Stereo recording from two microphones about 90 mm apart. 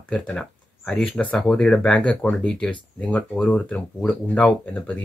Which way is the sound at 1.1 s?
10° left (ahead or behind).